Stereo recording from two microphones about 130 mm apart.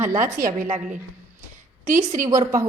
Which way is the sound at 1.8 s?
80° right.